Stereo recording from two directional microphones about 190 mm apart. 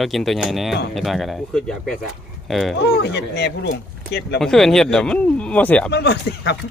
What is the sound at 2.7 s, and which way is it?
Speech, 60° left (ahead or behind).